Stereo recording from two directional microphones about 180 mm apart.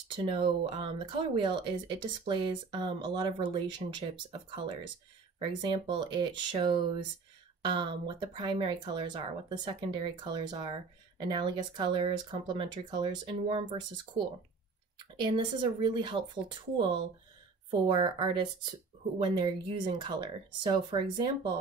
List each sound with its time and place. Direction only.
0.1 s speech: 30° right (ahead or behind)
17.8 s speech: 25° right (ahead or behind)